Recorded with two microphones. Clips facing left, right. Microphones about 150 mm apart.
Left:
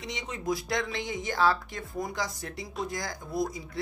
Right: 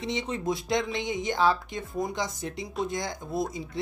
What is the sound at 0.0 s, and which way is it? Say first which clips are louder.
Speech: right 5 dB; 25° right (ahead or behind).